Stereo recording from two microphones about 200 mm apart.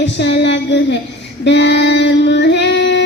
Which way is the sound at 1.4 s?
60° left (ahead or behind).